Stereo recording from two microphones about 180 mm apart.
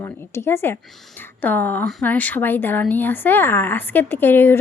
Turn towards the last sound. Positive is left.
turn(degrees=10)  # may be behind; listen again after turning